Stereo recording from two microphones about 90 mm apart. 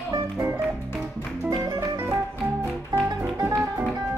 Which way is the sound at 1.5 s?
40° right (ahead or behind).